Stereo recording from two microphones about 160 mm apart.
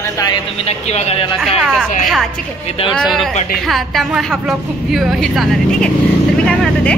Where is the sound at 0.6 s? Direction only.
40° left (ahead or behind).